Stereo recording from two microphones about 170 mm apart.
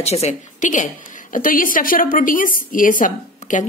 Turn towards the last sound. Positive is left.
turn(degrees=50)  # may be behind; listen again after turning